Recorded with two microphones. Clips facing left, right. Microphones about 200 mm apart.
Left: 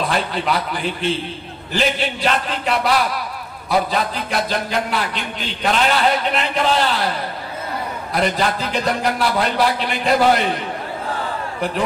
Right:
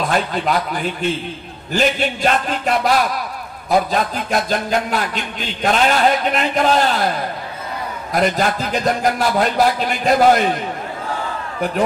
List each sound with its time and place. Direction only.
0.1 s a man's voice: 45° right (ahead or behind)
1.7 s a man's voice: 45° right (ahead or behind)
8.1 s a man's voice: 45° right (ahead or behind)